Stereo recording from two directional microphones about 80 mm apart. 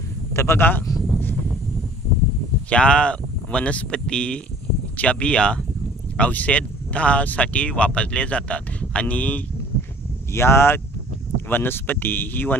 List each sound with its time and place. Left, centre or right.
0.3 s a man's voice: left
0.9 s a sound: centre
2.7 s speech: centre
10.3 s speech: left